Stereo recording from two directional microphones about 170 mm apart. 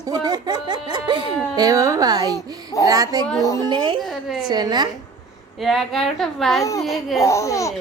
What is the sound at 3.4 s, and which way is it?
Speech, 20° left (ahead or behind).